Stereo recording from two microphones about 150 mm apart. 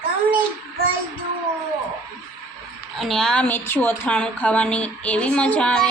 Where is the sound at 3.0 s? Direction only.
Centre (ahead or behind).